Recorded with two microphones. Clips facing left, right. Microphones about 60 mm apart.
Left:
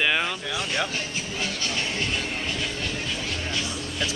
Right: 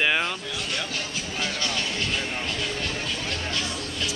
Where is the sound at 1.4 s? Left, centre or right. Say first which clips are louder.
Right 1 dB; left.